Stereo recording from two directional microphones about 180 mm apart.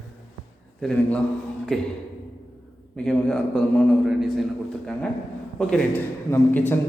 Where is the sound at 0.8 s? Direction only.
5° left (ahead or behind).